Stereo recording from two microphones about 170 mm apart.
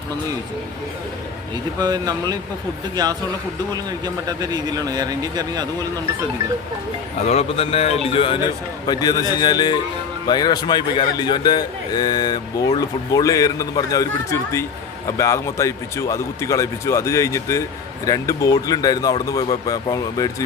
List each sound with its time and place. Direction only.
1.8 s speech: 25° right (ahead or behind)
7.3 s a man's voice: 35° left (ahead or behind); by 20.3 s 20° left (ahead or behind)